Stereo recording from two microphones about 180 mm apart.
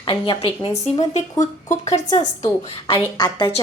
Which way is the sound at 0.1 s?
30° left (ahead or behind).